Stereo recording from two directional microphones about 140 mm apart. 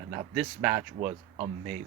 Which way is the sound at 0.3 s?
10° right (ahead or behind).